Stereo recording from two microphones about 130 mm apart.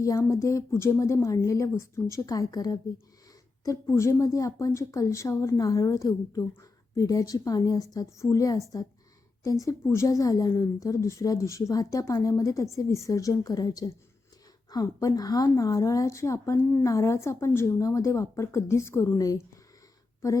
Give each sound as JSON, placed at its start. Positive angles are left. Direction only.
{"t": 0.0, "sound": "a woman's voice", "side_deg": 25}